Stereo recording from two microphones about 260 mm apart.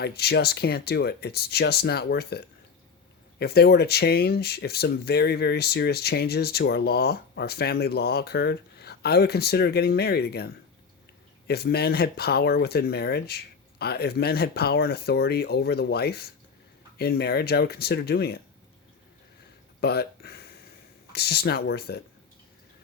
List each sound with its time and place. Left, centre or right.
0.0 s speech: left
19.8 s speech: left